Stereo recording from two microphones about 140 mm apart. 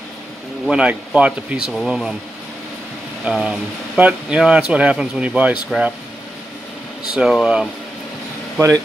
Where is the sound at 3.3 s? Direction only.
5° right (ahead or behind).